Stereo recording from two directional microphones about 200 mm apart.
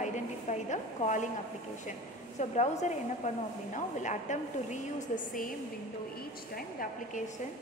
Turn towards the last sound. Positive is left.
turn(degrees=45)  # may be behind; listen again after turning